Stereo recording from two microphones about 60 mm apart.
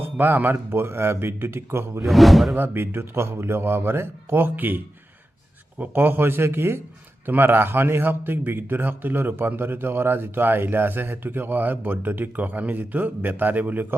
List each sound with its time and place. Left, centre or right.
0.0 s a man's voice: right
2.0 s speech: centre
2.6 s a man's voice: right
5.8 s a man's voice: right